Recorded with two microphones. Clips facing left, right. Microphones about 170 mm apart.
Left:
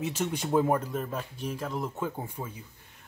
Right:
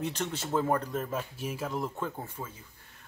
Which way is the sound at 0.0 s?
5° left (ahead or behind).